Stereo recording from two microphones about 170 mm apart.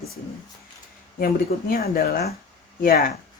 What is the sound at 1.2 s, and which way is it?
A woman's voice, 60° left (ahead or behind).